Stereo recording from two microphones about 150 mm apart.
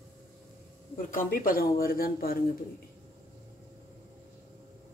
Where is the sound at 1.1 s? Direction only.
70° left (ahead or behind).